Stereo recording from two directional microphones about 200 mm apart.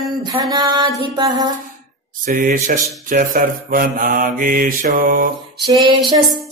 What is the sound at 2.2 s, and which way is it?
Speech, 45° right (ahead or behind).